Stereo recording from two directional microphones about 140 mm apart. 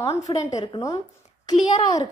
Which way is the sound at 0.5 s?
25° left (ahead or behind).